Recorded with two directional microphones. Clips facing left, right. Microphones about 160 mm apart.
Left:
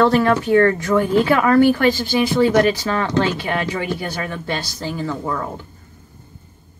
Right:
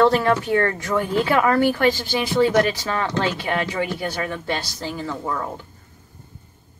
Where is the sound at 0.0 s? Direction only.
25° right (ahead or behind).